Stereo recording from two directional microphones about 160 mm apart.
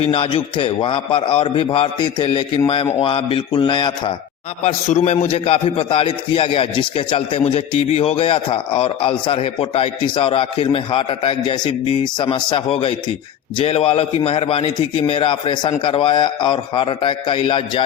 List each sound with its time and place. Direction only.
0.0 s a man's voice: 35° left (ahead or behind)
4.6 s a man's voice: 45° left (ahead or behind)